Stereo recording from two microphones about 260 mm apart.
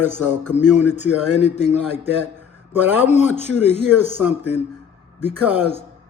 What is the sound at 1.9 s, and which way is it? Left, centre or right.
A man's voice, centre.